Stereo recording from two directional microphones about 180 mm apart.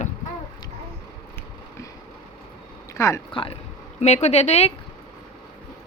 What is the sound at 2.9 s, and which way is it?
Speech, 15° left (ahead or behind).